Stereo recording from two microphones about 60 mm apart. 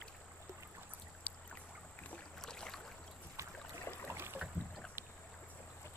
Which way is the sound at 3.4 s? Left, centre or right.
Right.